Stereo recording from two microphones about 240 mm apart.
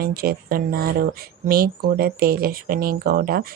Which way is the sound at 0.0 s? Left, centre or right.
Right.